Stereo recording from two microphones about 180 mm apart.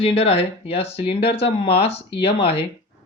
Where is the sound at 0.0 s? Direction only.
30° left (ahead or behind).